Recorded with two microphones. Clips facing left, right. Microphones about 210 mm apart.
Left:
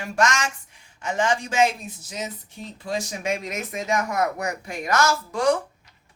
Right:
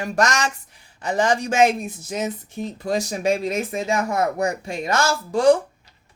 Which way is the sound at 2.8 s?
40° right (ahead or behind).